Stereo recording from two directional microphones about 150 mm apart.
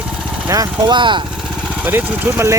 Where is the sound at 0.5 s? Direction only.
25° right (ahead or behind).